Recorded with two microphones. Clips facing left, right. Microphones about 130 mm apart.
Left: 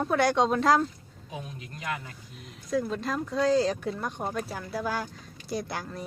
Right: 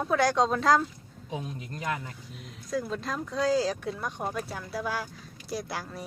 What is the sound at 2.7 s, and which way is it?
Speech, centre (ahead or behind).